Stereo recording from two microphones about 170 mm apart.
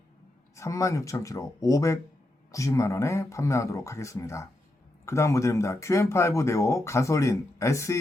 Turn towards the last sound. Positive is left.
turn(degrees=15)  # may be behind; listen again after turning